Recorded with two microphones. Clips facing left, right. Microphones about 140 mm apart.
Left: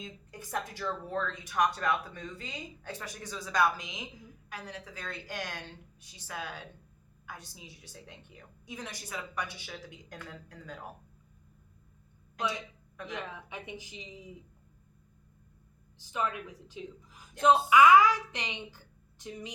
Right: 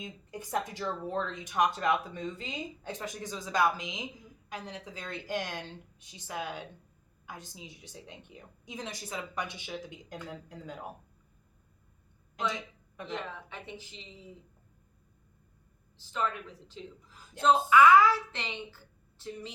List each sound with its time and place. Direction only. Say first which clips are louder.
0.0 s speech: right 3 dB; 20° right (ahead or behind)
13.1 s a woman's voice: right 2 dB; 15° left (ahead or behind)
16.0 s a woman's voice: even; 10° left (ahead or behind)